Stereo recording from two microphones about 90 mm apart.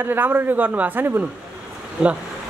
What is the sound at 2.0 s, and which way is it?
Speech, 10° right (ahead or behind).